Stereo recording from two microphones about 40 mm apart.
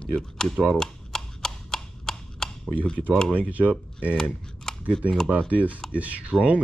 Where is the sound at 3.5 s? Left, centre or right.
Right.